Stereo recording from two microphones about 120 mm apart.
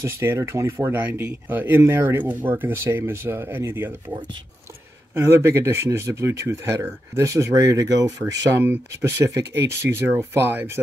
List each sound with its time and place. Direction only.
0.0 s speech: 25° right (ahead or behind)
5.1 s speech: 20° right (ahead or behind)